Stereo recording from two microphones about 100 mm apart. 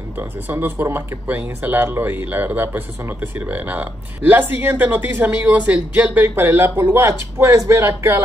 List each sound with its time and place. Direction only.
0.2 s speech: 20° right (ahead or behind)